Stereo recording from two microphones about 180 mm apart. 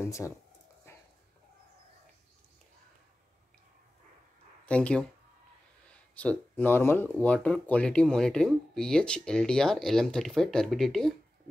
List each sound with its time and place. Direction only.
0.0 s speech: 15° left (ahead or behind)
0.9 s dog: 15° left (ahead or behind)
4.6 s speech: 5° left (ahead or behind)